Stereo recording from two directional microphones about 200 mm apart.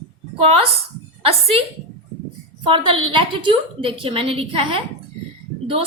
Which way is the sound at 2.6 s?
25° right (ahead or behind).